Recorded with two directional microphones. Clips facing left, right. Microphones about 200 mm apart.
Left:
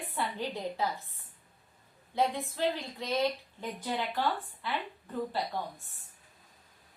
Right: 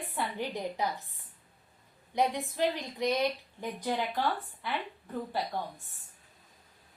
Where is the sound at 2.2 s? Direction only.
15° right (ahead or behind).